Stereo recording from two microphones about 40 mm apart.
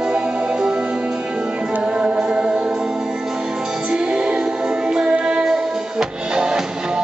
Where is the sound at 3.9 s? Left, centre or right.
Right.